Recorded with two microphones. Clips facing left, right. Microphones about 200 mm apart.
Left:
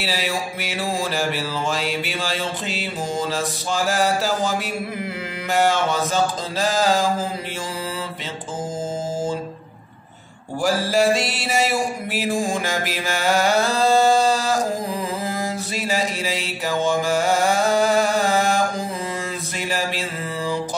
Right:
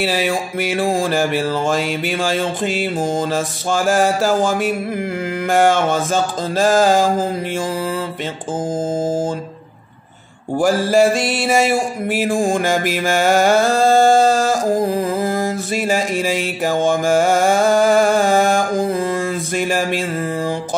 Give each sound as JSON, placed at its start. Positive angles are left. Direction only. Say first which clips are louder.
{"t": 0.0, "sound": "mantra", "louder": "right 6 dB", "side_deg": -50}
{"t": 9.0, "sound": "mantra", "louder": "right 5 dB", "side_deg": -50}
{"t": 10.6, "sound": "music", "louder": "right 5 dB", "side_deg": -50}